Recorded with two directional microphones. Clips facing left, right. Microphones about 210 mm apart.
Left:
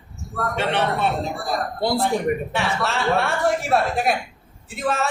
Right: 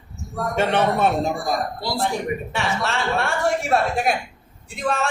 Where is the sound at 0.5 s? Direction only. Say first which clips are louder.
Right 3 dB; 45° right (ahead or behind).